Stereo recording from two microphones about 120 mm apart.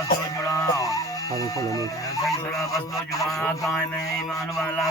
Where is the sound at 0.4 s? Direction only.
25° left (ahead or behind).